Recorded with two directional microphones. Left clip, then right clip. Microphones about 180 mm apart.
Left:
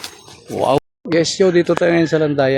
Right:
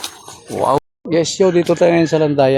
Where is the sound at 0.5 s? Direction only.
5° left (ahead or behind).